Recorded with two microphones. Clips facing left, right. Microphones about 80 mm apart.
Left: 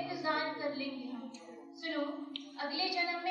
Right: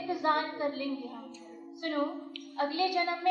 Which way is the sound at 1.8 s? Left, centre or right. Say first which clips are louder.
Right 5 dB; right.